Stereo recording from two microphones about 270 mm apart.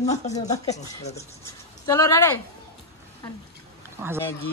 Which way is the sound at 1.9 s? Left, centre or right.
Centre.